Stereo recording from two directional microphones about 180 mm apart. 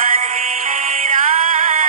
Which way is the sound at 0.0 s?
45° right (ahead or behind).